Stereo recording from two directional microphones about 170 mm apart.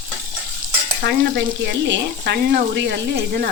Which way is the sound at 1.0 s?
70° right (ahead or behind).